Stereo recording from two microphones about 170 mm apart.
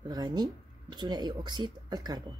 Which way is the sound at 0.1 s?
25° right (ahead or behind).